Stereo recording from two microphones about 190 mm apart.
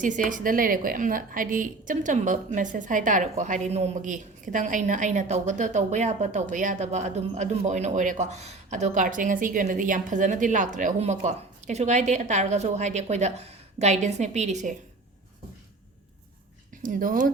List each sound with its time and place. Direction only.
0.0 s a woman's voice: 45° right (ahead or behind)
16.8 s speech: 45° right (ahead or behind)